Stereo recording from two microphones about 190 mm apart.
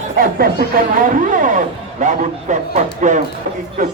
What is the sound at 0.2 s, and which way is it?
Speech, 50° right (ahead or behind).